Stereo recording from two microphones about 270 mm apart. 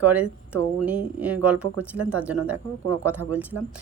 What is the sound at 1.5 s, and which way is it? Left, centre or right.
Speech, right.